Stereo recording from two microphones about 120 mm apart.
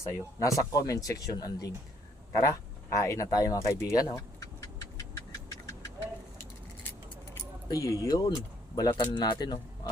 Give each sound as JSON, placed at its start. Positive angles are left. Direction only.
{"t": 0.0, "sound": "speech", "side_deg": 25}
{"t": 2.3, "sound": "a sound", "side_deg": 25}
{"t": 7.7, "sound": "speech", "side_deg": 30}